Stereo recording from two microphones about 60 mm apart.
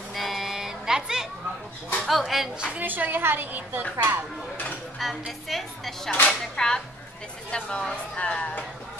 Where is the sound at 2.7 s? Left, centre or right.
Right.